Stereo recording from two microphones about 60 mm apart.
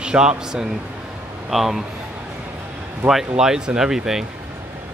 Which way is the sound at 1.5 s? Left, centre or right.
Centre.